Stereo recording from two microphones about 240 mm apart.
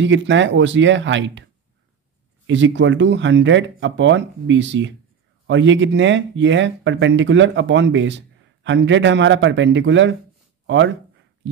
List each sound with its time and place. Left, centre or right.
0.0 s speech: right
2.4 s speech: right